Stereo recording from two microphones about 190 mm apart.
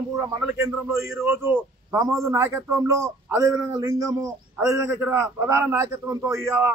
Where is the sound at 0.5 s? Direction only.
10° right (ahead or behind).